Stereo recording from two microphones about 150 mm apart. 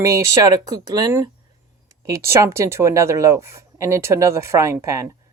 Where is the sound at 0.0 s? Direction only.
20° right (ahead or behind).